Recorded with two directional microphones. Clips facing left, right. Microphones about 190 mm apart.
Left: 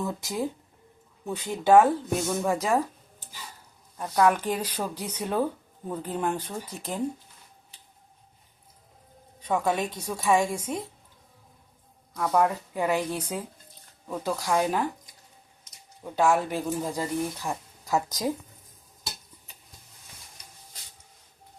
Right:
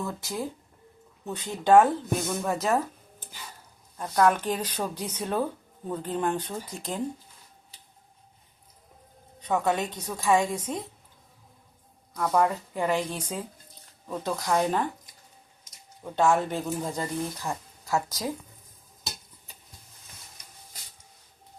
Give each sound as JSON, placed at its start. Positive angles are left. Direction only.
{"t": 0.0, "sound": "speech", "side_deg": 20}
{"t": 3.9, "sound": "speech", "side_deg": 5}
{"t": 9.5, "sound": "speech", "side_deg": 10}
{"t": 12.1, "sound": "speech", "side_deg": 5}
{"t": 16.0, "sound": "speech", "side_deg": 5}